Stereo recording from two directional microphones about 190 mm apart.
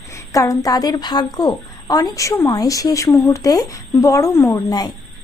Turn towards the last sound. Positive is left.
turn(degrees=20)  # may be behind; listen again after turning